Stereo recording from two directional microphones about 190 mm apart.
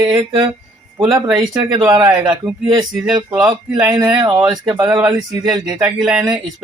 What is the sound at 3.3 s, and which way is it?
Speech, 20° right (ahead or behind).